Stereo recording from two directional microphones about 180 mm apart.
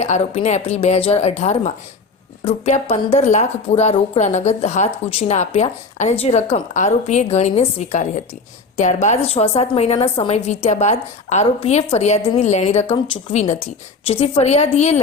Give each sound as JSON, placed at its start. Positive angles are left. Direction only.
{"t": 0.0, "sound": "a woman's voice", "side_deg": 40}